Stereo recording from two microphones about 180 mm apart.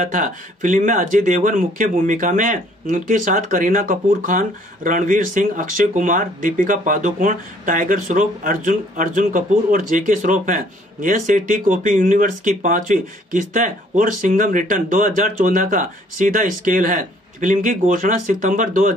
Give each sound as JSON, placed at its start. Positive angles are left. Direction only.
{"t": 0.0, "sound": "speech", "side_deg": -45}